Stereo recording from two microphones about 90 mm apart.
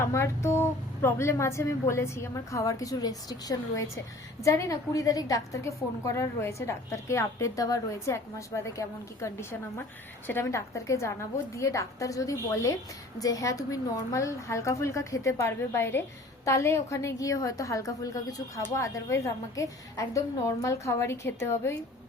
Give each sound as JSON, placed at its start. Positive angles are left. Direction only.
{"t": 0.0, "sound": "a woman's voice", "side_deg": 30}